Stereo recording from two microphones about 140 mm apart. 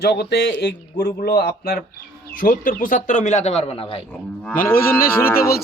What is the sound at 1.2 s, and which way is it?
Speech, 90° left.